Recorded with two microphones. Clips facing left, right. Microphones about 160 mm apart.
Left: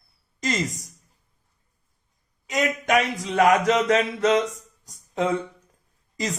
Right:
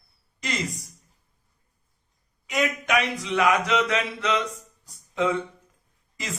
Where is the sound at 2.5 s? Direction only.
40° left (ahead or behind).